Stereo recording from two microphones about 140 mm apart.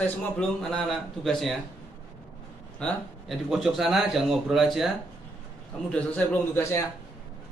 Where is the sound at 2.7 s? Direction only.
5° left (ahead or behind).